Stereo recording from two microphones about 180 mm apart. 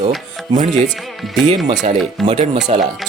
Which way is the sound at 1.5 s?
40° right (ahead or behind).